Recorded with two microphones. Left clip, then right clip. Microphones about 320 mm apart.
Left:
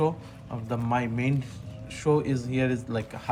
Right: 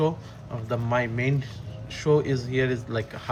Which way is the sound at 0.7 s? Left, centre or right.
Centre.